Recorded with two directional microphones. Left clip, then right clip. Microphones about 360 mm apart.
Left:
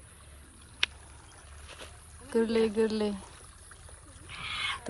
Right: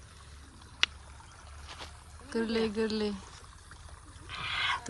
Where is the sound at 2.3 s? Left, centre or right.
Centre.